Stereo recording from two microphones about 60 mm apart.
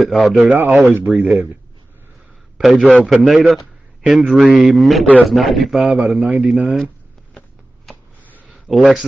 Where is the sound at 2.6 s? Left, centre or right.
Centre.